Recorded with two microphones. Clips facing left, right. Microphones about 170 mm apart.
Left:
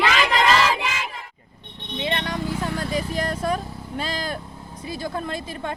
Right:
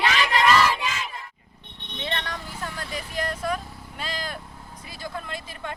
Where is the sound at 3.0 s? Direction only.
40° left (ahead or behind).